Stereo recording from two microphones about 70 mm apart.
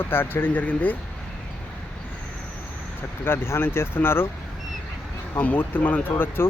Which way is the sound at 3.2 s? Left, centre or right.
Left.